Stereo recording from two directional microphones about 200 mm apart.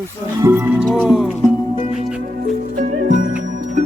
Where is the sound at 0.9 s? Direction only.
Centre (ahead or behind).